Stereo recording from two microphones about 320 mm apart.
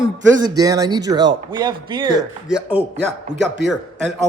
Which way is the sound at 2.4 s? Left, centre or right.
Centre.